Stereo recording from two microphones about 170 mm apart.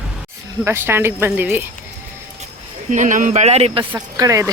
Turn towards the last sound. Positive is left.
turn(degrees=-20)  # may be behind; listen again after turning